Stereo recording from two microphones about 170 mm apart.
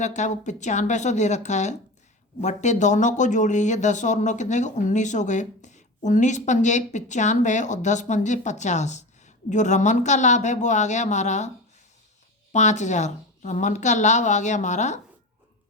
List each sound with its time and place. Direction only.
0.0 s speech: 45° left (ahead or behind)
12.5 s speech: 45° left (ahead or behind)